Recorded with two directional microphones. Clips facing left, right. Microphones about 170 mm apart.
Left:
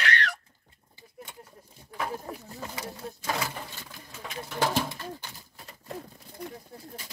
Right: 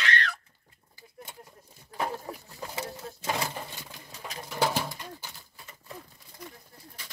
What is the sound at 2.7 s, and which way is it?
Speech, 25° right (ahead or behind).